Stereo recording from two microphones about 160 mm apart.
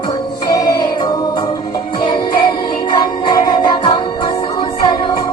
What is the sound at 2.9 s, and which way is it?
Music, 25° left (ahead or behind).